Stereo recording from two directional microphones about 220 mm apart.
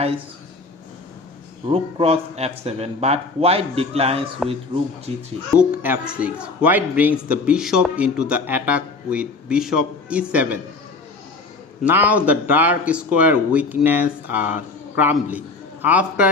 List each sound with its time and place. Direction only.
1.6 s speech: 25° right (ahead or behind)
5.8 s a man's voice: 5° right (ahead or behind)
11.8 s speech: 10° right (ahead or behind)